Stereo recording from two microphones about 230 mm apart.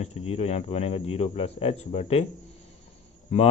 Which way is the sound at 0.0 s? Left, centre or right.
Left.